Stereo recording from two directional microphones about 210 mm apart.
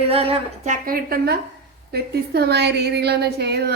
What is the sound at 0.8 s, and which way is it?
A woman's voice, 45° right (ahead or behind).